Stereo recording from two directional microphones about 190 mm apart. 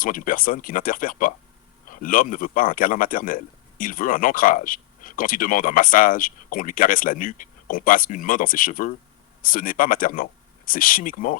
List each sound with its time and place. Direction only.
0.0 s a man's voice: 45° left (ahead or behind)